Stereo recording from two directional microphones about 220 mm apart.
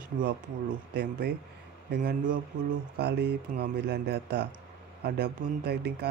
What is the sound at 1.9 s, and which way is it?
Speech, 40° right (ahead or behind).